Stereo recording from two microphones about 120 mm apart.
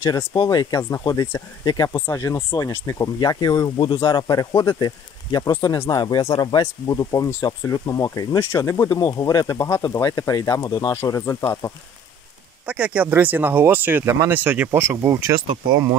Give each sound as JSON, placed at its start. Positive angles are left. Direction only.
{"t": 0.0, "sound": "speech", "side_deg": 30}
{"t": 12.6, "sound": "speech", "side_deg": -10}